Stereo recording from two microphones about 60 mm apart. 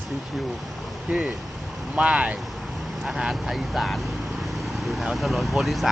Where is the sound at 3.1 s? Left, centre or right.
Centre.